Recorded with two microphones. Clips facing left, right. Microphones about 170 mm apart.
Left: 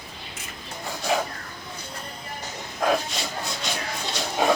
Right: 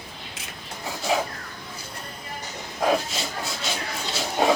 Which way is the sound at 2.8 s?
5° right (ahead or behind).